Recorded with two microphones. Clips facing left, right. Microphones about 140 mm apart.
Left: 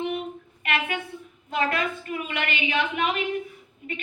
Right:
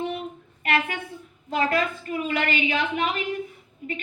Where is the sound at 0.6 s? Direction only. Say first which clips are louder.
Right 2 dB; 35° right (ahead or behind).